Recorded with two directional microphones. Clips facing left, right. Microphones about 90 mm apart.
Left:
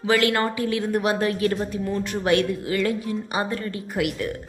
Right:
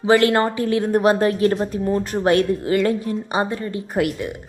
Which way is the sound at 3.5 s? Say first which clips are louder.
Right 3 dB; 20° right (ahead or behind).